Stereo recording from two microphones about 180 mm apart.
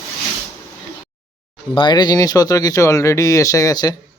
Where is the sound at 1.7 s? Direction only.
25° left (ahead or behind).